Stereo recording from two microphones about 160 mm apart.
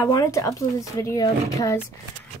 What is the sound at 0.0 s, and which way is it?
Speech, 20° left (ahead or behind).